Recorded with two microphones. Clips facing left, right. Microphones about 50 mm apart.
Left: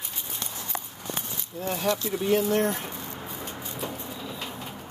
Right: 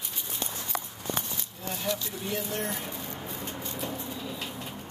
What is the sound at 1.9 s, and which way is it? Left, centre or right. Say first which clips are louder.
Speech: left 8 dB; left.